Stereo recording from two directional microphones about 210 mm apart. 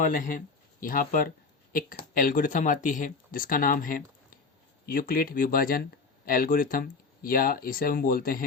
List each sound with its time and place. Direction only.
0.0 s speech: 40° left (ahead or behind)